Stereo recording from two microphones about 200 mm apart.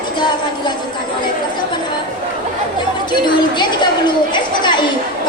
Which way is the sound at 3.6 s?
20° left (ahead or behind).